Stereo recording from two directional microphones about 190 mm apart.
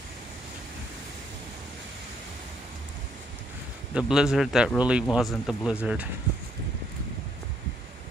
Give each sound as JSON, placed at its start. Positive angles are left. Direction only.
{"t": 3.9, "sound": "speech", "side_deg": -5}